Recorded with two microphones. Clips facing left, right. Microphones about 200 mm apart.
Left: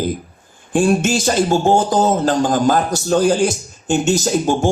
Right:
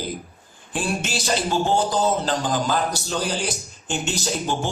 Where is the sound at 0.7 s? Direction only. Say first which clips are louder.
Left 11 dB; 45° left (ahead or behind).